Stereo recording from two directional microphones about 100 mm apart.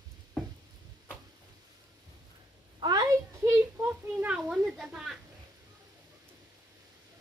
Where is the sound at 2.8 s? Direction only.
35° right (ahead or behind); by 4.4 s 20° right (ahead or behind).